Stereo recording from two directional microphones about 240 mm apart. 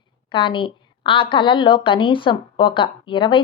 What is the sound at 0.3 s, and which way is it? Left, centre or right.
A woman's voice, centre.